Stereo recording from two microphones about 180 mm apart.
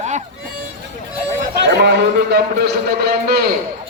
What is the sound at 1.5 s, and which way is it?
A man's voice, 65° right (ahead or behind).